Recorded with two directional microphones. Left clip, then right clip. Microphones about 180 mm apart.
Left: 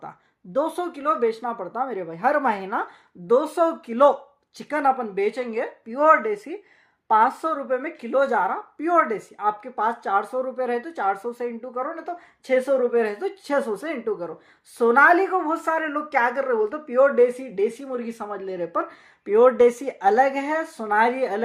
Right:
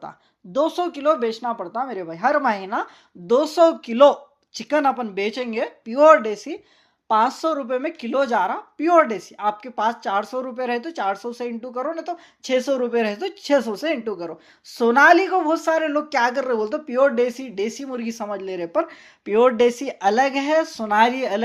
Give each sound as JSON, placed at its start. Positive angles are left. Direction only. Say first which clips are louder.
{"t": 0.5, "sound": "speech", "louder": "right 3 dB", "side_deg": -15}
{"t": 3.3, "sound": "speech", "louder": "right 4 dB", "side_deg": -30}
{"t": 7.1, "sound": "speech", "louder": "even", "side_deg": -25}
{"t": 7.5, "sound": "speech", "louder": "right 2 dB", "side_deg": -35}
{"t": 15.6, "sound": "speech", "louder": "right 4 dB", "side_deg": -45}
{"t": 16.3, "sound": "speech", "louder": "right 1 dB", "side_deg": -35}
{"t": 19.7, "sound": "speech", "louder": "even", "side_deg": -30}